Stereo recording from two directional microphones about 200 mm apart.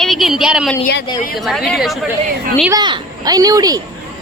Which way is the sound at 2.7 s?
20° right (ahead or behind).